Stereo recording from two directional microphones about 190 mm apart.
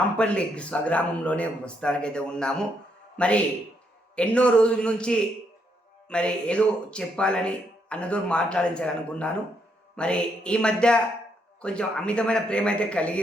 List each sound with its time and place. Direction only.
0.2 s a man's voice: 5° left (ahead or behind)